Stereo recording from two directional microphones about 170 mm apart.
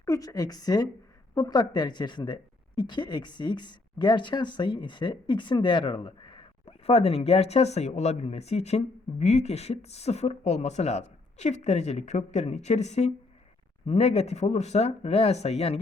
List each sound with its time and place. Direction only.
0.0 s a woman's voice: 20° left (ahead or behind); by 15.8 s 40° left (ahead or behind)